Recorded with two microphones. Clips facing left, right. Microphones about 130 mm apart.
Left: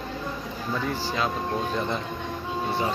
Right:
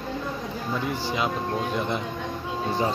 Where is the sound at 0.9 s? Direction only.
15° right (ahead or behind).